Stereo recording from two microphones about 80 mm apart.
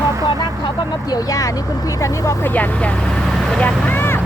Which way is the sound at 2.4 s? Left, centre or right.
Left.